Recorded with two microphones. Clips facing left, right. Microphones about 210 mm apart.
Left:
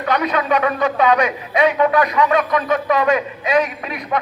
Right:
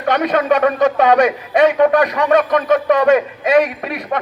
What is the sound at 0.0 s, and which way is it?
Speech, 45° right (ahead or behind).